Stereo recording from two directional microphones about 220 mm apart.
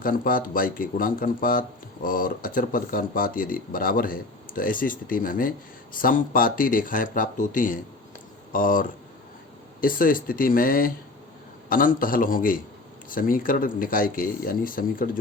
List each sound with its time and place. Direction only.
0.0 s speech: 40° left (ahead or behind)